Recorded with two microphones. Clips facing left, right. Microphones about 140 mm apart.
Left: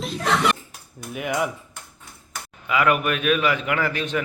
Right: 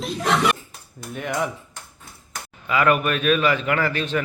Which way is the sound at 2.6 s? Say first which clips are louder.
Right 1 dB; 10° left (ahead or behind).